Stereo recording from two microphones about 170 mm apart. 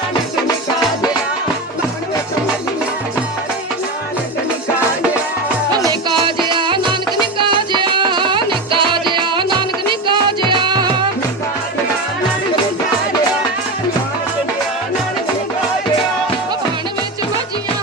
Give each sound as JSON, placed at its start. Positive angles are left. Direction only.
{"t": 5.7, "sound": "music", "side_deg": -25}